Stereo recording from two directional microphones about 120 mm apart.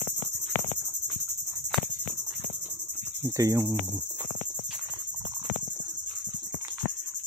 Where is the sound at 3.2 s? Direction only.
25° right (ahead or behind).